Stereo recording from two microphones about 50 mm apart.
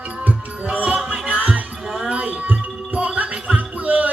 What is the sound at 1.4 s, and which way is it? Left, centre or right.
Basketball bounce, right.